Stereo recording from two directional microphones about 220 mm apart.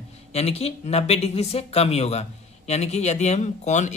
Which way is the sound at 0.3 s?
30° left (ahead or behind).